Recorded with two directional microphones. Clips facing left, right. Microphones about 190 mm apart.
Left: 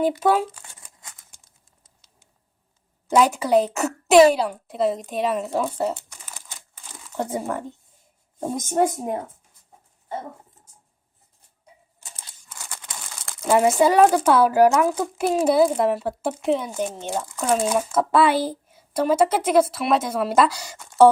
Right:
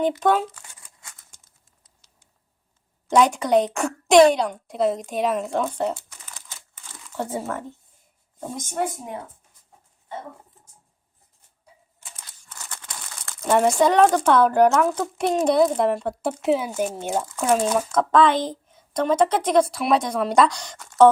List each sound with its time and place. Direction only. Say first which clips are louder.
0.2 s speech: left 1 dB; 10° left (ahead or behind)
0.5 s crumpling: left 1 dB; 20° left (ahead or behind)
3.1 s a woman's voice: even; 5° left (ahead or behind)
5.9 s a sound: even; 15° left (ahead or behind)
6.8 s crumpling: left 2 dB; 15° left (ahead or behind)
8.7 s speech: left 6 dB; 40° left (ahead or behind)
12.5 s speech: left 1 dB; 10° left (ahead or behind); by 17.2 s 10° right (ahead or behind)
17.4 s speech: even; 5° left (ahead or behind)